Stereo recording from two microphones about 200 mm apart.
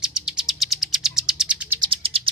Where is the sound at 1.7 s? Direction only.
25° right (ahead or behind).